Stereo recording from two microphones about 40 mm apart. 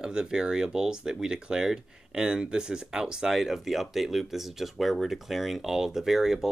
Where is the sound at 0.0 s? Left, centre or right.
Centre.